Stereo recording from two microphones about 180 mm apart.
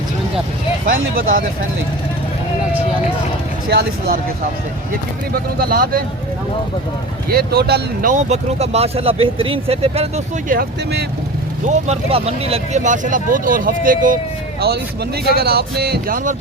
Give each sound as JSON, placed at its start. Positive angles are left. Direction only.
{"t": 3.7, "sound": "speech", "side_deg": -55}
{"t": 5.3, "sound": "speech", "side_deg": -55}
{"t": 7.3, "sound": "speech", "side_deg": -60}
{"t": 8.1, "sound": "speech", "side_deg": -35}
{"t": 10.5, "sound": "speech", "side_deg": -55}
{"t": 11.9, "sound": "speech", "side_deg": -35}
{"t": 14.6, "sound": "speech", "side_deg": -60}